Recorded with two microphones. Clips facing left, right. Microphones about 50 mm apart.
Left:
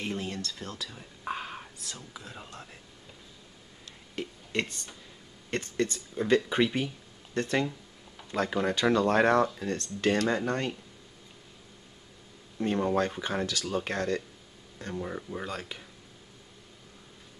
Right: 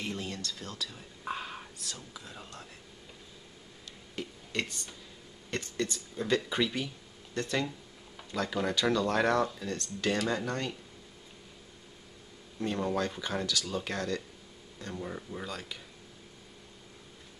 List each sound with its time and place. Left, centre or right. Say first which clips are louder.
0.0 s a sound: left 3 dB; left
0.8 s whispering: left 1 dB; centre
2.0 s speech: left 2 dB; centre
4.1 s a sound: left 4 dB; left
5.5 s speech: left 4 dB; left
12.5 s speech: left 4 dB; centre
14.9 s speech: left 4 dB; centre
15.4 s speech: left 3 dB; left